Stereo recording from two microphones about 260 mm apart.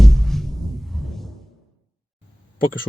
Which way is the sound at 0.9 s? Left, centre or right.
Centre.